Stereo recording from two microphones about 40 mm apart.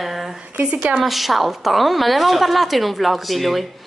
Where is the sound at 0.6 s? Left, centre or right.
Right.